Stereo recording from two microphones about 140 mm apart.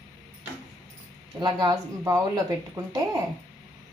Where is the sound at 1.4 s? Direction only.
30° right (ahead or behind).